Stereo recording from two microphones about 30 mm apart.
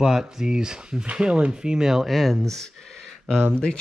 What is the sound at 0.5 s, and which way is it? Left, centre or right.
Speech, right.